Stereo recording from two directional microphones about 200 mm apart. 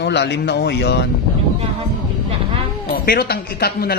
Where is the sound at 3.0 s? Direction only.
50° left (ahead or behind).